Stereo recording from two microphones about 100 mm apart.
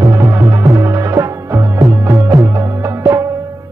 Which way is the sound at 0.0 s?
25° right (ahead or behind).